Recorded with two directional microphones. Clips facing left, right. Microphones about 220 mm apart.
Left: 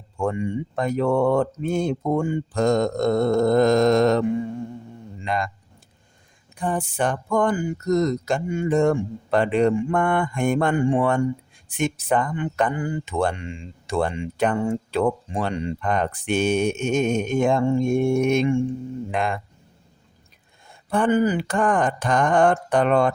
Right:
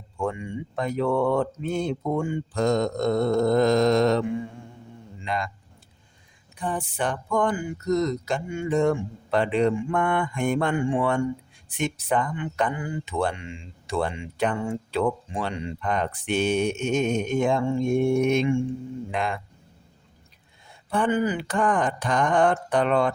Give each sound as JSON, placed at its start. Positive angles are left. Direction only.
{"t": 0.2, "sound": "a man's voice", "side_deg": 45}
{"t": 6.6, "sound": "speech", "side_deg": 45}
{"t": 20.9, "sound": "speech", "side_deg": 45}